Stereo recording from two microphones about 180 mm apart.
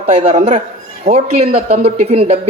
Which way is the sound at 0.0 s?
35° right (ahead or behind).